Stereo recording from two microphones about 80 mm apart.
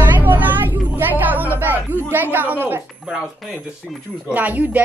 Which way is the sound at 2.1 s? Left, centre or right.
Right.